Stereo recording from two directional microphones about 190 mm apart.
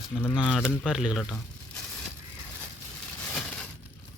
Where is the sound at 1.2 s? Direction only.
5° left (ahead or behind).